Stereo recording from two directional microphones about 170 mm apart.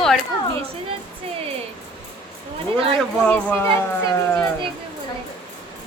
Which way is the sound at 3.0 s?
5° left (ahead or behind).